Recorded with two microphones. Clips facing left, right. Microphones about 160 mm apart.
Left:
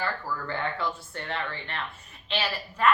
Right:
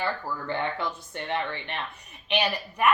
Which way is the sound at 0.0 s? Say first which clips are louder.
Right 1 dB; 20° right (ahead or behind).